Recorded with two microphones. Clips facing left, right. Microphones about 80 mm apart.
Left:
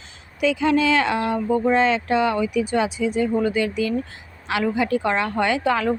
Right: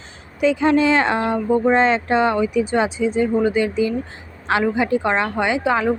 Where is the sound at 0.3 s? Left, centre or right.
Right.